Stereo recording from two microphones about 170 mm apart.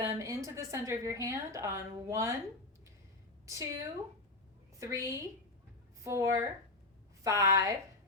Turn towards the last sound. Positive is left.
turn(degrees=-20)  # may be behind; listen again after turning